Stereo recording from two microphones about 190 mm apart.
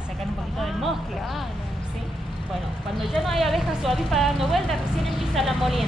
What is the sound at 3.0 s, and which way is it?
A woman's voice, centre (ahead or behind).